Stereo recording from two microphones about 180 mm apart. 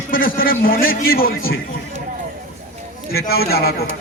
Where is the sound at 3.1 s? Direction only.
60° left (ahead or behind).